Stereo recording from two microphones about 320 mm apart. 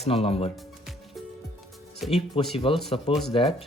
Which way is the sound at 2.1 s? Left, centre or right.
Centre.